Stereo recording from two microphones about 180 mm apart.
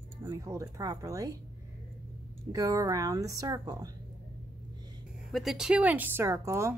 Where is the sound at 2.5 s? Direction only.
20° right (ahead or behind).